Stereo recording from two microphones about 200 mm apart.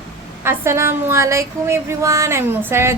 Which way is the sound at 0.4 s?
15° right (ahead or behind).